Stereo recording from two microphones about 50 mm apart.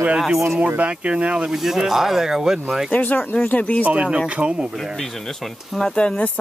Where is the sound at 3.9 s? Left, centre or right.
Right.